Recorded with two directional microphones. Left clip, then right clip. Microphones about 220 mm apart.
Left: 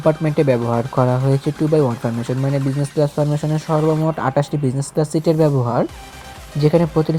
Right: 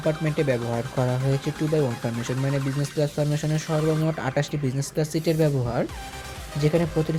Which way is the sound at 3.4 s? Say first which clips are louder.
Left 8 dB; centre (ahead or behind).